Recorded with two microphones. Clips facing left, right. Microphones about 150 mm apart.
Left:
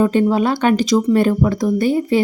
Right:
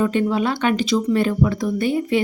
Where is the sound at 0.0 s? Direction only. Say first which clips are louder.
Left 4 dB; 35° left (ahead or behind).